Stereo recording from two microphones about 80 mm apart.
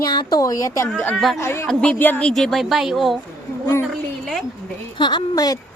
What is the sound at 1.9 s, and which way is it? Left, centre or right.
Speech, left.